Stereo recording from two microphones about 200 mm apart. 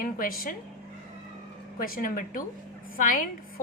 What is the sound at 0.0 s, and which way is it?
Speech, 45° left (ahead or behind).